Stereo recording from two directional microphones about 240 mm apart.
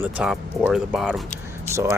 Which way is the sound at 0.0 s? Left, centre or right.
Centre.